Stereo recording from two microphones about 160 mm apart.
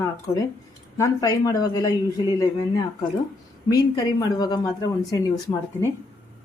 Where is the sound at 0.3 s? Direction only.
20° left (ahead or behind).